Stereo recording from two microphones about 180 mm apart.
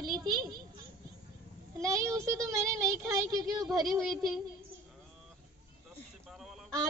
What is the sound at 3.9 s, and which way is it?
Child singing, centre (ahead or behind).